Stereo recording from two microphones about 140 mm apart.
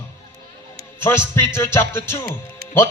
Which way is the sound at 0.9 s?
15° left (ahead or behind).